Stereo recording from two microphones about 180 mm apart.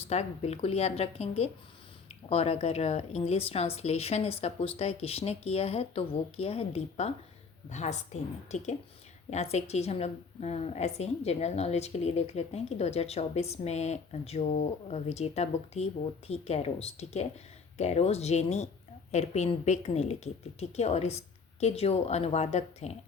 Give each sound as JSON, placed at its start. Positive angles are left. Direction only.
{"t": 0.1, "sound": "a woman's voice", "side_deg": 35}